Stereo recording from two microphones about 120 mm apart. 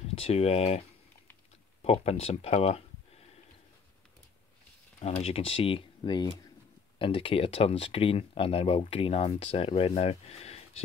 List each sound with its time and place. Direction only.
0.1 s speech: 55° left (ahead or behind)
1.8 s speech: 60° left (ahead or behind)
5.0 s speech: 60° left (ahead or behind)